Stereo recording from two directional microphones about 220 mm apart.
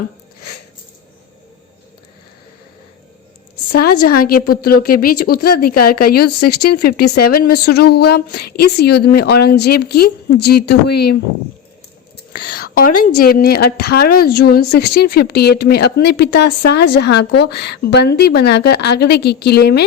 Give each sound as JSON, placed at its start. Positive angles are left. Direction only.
{"t": 3.9, "sound": "a woman's voice", "side_deg": 90}
{"t": 4.2, "sound": "speech", "side_deg": 40}
{"t": 12.7, "sound": "a woman's voice", "side_deg": 40}